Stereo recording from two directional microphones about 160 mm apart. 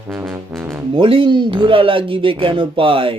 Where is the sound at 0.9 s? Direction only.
30° right (ahead or behind).